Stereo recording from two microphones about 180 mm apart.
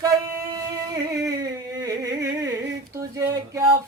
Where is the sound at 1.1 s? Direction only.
20° right (ahead or behind).